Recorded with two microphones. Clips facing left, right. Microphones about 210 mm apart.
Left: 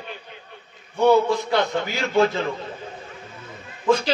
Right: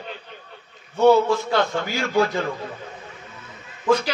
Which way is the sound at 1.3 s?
20° left (ahead or behind).